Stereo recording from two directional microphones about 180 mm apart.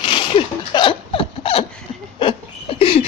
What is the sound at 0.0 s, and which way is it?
Zipper, 30° left (ahead or behind).